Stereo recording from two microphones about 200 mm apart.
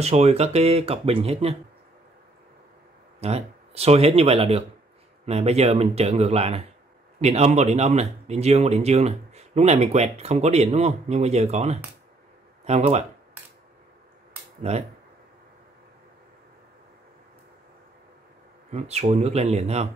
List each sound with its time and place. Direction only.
0.0 s speech: 30° right (ahead or behind)
3.2 s speech: 30° right (ahead or behind)
14.6 s speech: 35° right (ahead or behind)
18.7 s speech: 35° right (ahead or behind)